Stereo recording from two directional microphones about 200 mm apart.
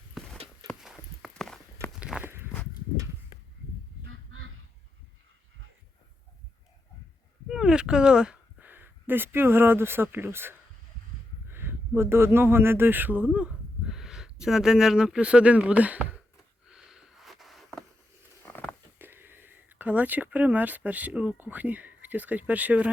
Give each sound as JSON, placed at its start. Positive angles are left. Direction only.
{"t": 0.2, "sound": "a sound", "side_deg": 0}
{"t": 0.7, "sound": "walk", "side_deg": 0}
{"t": 4.0, "sound": "goose", "side_deg": -75}
{"t": 7.4, "sound": "speech", "side_deg": -5}
{"t": 11.4, "sound": "a sound", "side_deg": -10}
{"t": 11.9, "sound": "speech", "side_deg": -10}
{"t": 16.6, "sound": "sniff", "side_deg": -5}
{"t": 18.4, "sound": "a sound", "side_deg": 10}
{"t": 18.9, "sound": "speech", "side_deg": -10}